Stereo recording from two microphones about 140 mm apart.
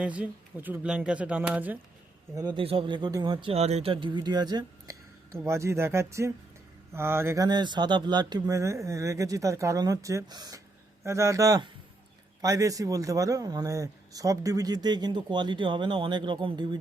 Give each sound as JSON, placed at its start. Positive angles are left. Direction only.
{"t": 0.0, "sound": "speech", "side_deg": -10}
{"t": 2.3, "sound": "a man's voice", "side_deg": -25}
{"t": 2.6, "sound": "speech", "side_deg": -40}
{"t": 3.5, "sound": "a man's voice", "side_deg": -50}
{"t": 7.4, "sound": "a man's voice", "side_deg": -30}